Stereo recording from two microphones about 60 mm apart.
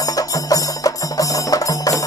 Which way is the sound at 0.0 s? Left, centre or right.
Left.